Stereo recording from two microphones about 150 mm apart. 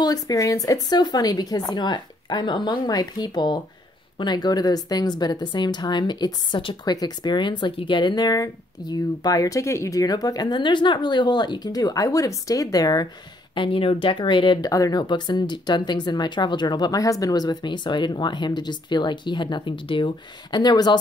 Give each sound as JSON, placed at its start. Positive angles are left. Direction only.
{"t": 0.0, "sound": "a woman's voice", "side_deg": 25}
{"t": 13.6, "sound": "a woman's voice", "side_deg": 35}